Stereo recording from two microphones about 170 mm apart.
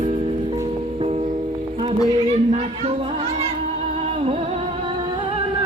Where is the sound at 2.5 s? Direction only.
35° right (ahead or behind).